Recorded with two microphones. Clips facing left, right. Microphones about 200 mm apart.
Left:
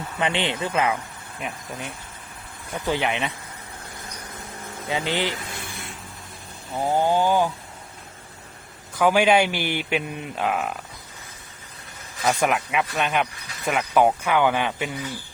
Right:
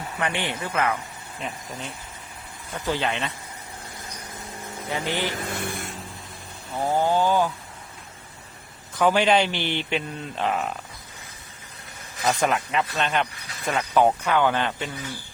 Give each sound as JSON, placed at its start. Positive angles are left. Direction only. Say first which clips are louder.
{"t": 0.2, "sound": "speech", "louder": "left 4 dB", "side_deg": 20}
{"t": 4.9, "sound": "speech", "louder": "left 2 dB", "side_deg": 15}
{"t": 5.5, "sound": "vehicle", "louder": "right 6 dB", "side_deg": -55}
{"t": 6.7, "sound": "speech", "louder": "left 1 dB", "side_deg": 10}
{"t": 9.0, "sound": "speech", "louder": "left 2 dB", "side_deg": 10}
{"t": 12.4, "sound": "speech", "louder": "left 1 dB", "side_deg": 10}